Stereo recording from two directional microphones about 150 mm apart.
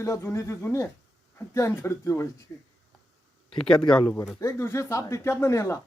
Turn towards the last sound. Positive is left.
turn(degrees=20)  # may be behind; listen again after turning